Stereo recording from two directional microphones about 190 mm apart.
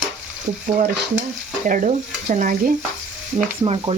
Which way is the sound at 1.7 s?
45° right (ahead or behind).